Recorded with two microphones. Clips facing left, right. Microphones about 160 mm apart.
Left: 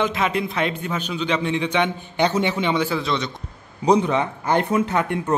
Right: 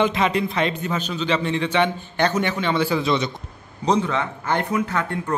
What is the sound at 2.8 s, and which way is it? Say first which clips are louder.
Speech: right 3 dB; 5° right (ahead or behind).